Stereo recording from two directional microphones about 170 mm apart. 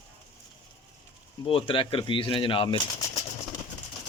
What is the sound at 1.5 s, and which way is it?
Speech, 30° left (ahead or behind).